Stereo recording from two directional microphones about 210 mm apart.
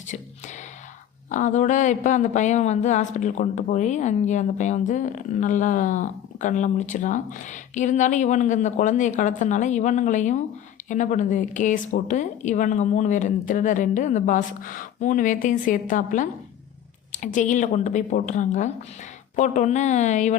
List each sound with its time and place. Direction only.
1.3 s a woman's voice: 35° left (ahead or behind)